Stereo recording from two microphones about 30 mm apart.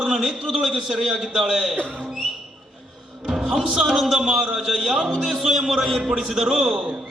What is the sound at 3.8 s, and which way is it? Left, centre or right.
Speech, centre.